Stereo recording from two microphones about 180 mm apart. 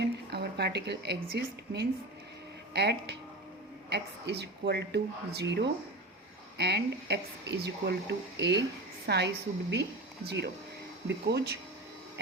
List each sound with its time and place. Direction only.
0.0 s a woman's voice: 65° right (ahead or behind)